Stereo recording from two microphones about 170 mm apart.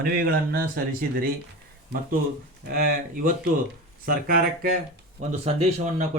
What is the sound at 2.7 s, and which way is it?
Speech, 55° right (ahead or behind).